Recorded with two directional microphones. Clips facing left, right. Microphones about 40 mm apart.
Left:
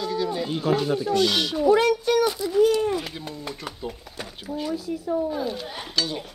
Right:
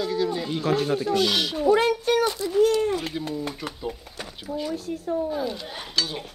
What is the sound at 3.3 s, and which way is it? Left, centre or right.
Speech, centre.